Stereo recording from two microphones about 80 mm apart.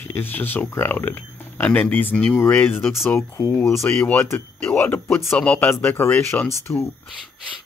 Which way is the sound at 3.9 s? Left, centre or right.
Left.